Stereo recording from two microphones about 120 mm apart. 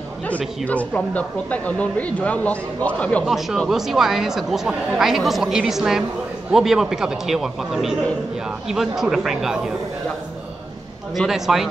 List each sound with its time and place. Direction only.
0.7 s speech: 10° left (ahead or behind)
3.3 s speech: centre (ahead or behind)
11.1 s speech: centre (ahead or behind)